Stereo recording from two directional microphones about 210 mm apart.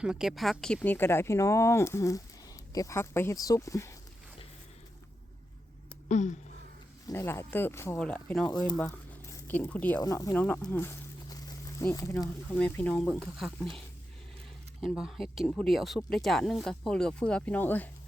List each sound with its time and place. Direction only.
0.0 s speech: 5° right (ahead or behind); by 3.9 s 15° left (ahead or behind)
6.1 s a sound: 35° left (ahead or behind)
7.1 s speech: 15° left (ahead or behind)